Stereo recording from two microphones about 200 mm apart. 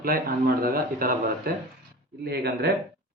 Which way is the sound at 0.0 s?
50° right (ahead or behind).